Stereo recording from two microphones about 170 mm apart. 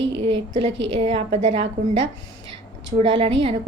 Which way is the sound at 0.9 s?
40° right (ahead or behind).